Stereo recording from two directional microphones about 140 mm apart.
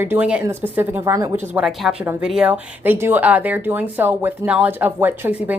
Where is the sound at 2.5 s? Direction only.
15° right (ahead or behind).